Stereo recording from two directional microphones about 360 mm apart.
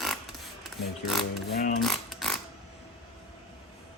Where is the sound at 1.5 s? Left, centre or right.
Left.